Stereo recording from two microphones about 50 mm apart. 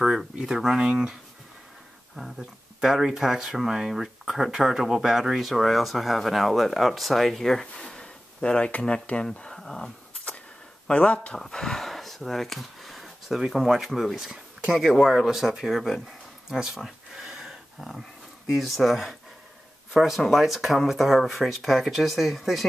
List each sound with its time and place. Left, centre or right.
0.0 s speech: centre
2.8 s speech: centre
10.9 s speech: left
11.3 s speech: centre
16.4 s a sound: centre
18.5 s speech: centre